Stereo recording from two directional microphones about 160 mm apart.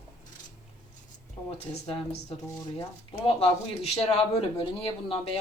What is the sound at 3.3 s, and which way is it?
A man's voice, 40° left (ahead or behind).